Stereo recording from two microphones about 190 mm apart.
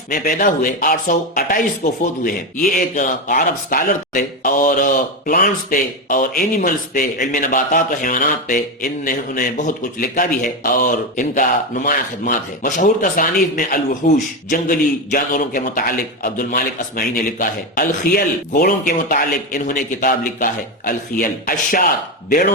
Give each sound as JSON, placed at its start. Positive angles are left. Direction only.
{"t": 0.1, "sound": "a man's voice", "side_deg": 45}
{"t": 14.5, "sound": "a man's voice", "side_deg": 50}